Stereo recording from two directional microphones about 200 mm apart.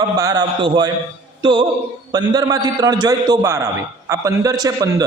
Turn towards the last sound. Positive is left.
turn(degrees=-20)  # may be behind; listen again after turning